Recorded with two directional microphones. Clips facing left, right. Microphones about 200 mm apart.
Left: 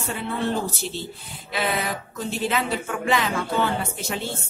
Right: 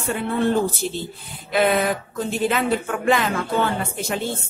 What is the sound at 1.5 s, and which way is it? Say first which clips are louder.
A woman's voice: right 7 dB; 50° right (ahead or behind).